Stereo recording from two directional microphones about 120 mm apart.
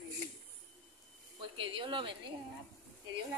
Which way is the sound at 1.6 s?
45° right (ahead or behind).